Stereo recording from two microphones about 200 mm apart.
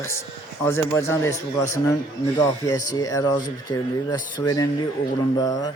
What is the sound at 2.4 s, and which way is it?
Speech, 15° left (ahead or behind).